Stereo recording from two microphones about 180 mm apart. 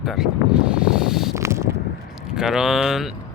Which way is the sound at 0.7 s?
5° right (ahead or behind).